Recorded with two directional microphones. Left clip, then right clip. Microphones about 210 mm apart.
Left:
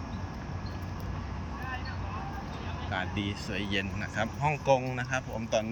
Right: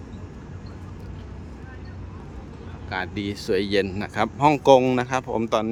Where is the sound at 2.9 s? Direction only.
20° right (ahead or behind).